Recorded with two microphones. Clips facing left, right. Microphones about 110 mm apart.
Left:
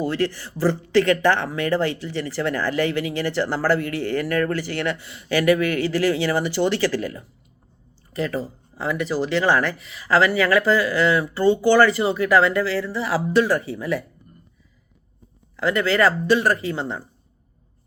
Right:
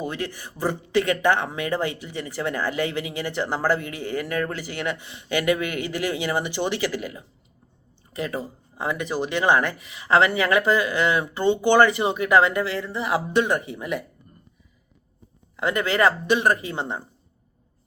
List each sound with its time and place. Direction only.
0.0 s speech: 20° right (ahead or behind)
15.5 s speech: 25° right (ahead or behind)